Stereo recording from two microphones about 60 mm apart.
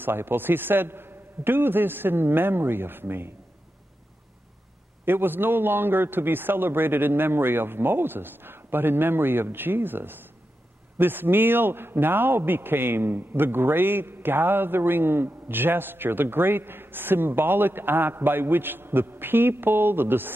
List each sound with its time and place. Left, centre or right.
0.0 s a man's voice: right
5.0 s a man's voice: right